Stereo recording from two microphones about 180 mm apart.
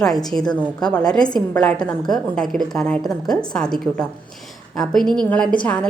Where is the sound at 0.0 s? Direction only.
Centre (ahead or behind).